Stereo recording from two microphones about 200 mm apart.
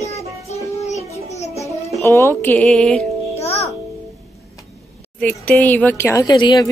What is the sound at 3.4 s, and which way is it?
Music, 30° left (ahead or behind).